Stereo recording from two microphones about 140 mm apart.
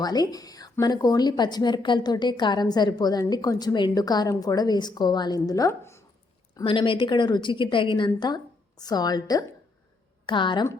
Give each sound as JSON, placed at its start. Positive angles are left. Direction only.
{"t": 0.0, "sound": "speech", "side_deg": 30}
{"t": 6.7, "sound": "a woman's voice", "side_deg": 40}